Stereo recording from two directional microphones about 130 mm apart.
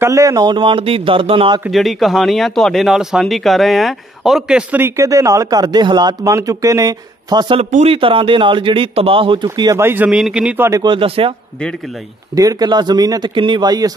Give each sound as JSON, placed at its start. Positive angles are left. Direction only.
{"t": 0.0, "sound": "speech", "side_deg": -25}
{"t": 1.7, "sound": "speech", "side_deg": 0}
{"t": 4.8, "sound": "speech", "side_deg": -25}
{"t": 7.7, "sound": "a man's voice", "side_deg": -50}
{"t": 9.7, "sound": "speech", "side_deg": -20}
{"t": 10.8, "sound": "a man's voice", "side_deg": -40}
{"t": 12.4, "sound": "speech", "side_deg": -30}